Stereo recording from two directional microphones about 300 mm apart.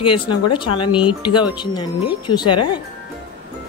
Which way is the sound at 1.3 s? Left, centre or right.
Centre.